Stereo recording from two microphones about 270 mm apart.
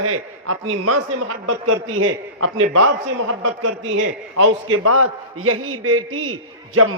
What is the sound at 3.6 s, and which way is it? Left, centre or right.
A man's voice, right.